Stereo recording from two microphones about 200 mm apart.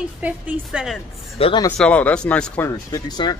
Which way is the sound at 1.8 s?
5° left (ahead or behind).